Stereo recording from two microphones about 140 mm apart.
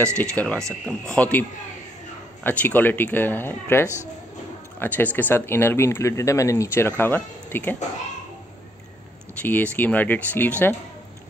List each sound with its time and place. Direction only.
0.2 s speech: 10° left (ahead or behind)
2.4 s speech: 10° left (ahead or behind)
9.4 s speech: 10° left (ahead or behind)